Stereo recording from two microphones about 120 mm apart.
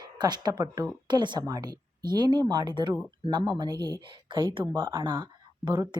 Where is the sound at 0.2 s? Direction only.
35° right (ahead or behind).